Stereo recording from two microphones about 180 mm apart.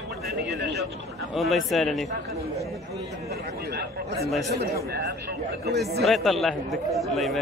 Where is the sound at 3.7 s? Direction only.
60° right (ahead or behind).